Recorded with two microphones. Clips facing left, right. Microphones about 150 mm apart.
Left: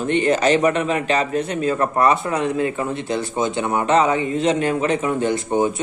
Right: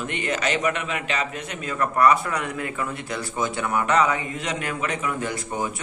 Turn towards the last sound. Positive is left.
turn(degrees=25)  # may be behind; listen again after turning